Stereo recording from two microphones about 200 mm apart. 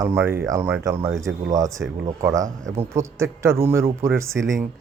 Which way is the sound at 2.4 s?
35° right (ahead or behind).